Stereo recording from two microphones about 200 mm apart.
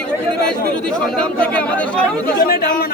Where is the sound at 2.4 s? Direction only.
45° left (ahead or behind).